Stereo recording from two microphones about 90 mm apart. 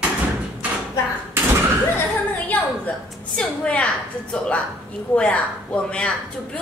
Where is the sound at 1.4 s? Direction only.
25° right (ahead or behind).